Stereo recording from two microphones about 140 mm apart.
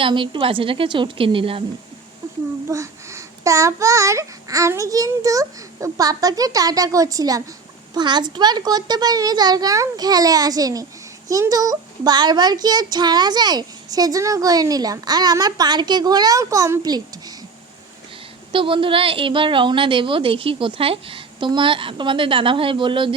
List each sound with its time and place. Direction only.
0.0 s a woman's voice: 35° right (ahead or behind)
2.6 s a child's voice: 20° right (ahead or behind)
18.5 s a woman's voice: 40° right (ahead or behind)